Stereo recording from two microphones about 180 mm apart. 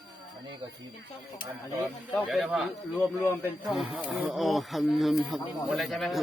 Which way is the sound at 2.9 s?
10° left (ahead or behind).